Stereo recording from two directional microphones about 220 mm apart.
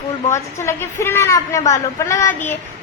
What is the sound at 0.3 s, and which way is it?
A child's voice, 10° left (ahead or behind).